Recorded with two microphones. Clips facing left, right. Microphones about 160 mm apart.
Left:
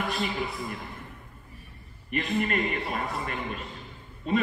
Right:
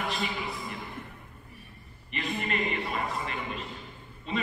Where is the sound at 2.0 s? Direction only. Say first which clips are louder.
Left 5 dB; 50° left (ahead or behind).